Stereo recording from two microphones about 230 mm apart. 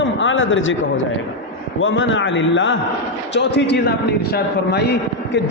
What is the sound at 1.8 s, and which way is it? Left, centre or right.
A man's voice, left.